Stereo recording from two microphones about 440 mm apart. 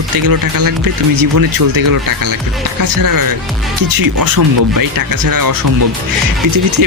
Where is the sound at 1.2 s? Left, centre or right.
Right.